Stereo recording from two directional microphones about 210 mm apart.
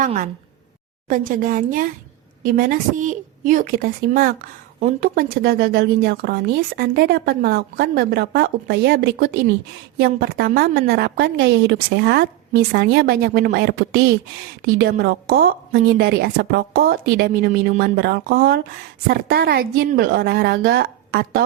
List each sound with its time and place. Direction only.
0.0 s a woman's voice: 40° right (ahead or behind)